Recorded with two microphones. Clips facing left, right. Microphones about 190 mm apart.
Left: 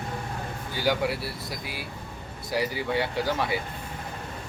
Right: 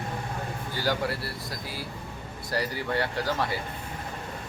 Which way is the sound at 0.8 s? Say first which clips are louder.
Left 3 dB; centre (ahead or behind).